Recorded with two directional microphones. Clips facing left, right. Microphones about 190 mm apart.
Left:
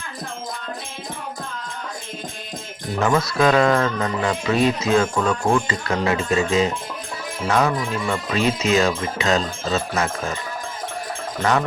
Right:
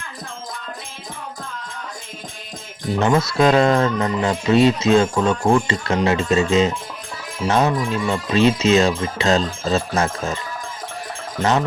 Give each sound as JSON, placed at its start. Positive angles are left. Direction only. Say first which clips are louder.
{"t": 3.0, "sound": "speech", "louder": "right 2 dB", "side_deg": -25}